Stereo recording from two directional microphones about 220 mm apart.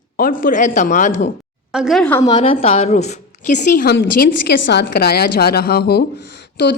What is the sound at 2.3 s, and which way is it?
A woman's voice, 25° left (ahead or behind).